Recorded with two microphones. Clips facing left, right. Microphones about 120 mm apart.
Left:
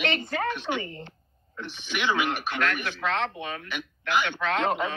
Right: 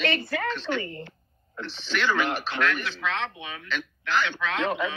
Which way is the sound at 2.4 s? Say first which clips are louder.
Right 1 dB; 50° left (ahead or behind).